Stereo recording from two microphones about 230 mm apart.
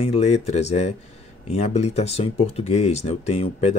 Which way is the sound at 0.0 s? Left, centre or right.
Left.